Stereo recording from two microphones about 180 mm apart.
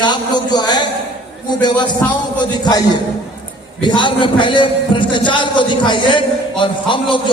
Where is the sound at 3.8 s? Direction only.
25° left (ahead or behind).